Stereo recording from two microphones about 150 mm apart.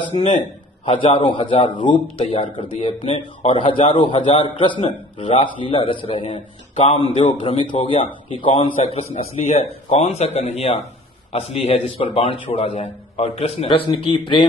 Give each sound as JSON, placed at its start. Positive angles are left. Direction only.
{"t": 0.2, "sound": "a man's voice", "side_deg": 50}
{"t": 1.2, "sound": "a man's voice", "side_deg": 35}